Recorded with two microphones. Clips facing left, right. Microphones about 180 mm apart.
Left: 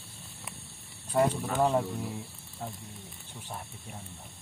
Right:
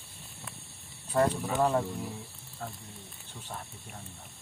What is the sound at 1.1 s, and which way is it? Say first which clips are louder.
Speech: even; 10° left (ahead or behind).